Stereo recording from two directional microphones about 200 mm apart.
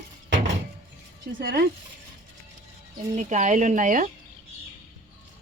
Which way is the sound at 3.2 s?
35° right (ahead or behind).